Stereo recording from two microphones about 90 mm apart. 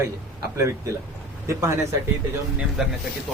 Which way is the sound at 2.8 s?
5° right (ahead or behind).